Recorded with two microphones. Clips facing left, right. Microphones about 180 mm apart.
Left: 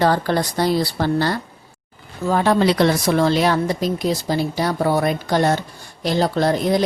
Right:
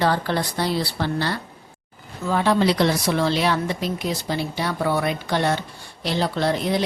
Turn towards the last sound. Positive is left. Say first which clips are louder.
# left 4 dB
turn(degrees=40)  # may be behind; listen again after turning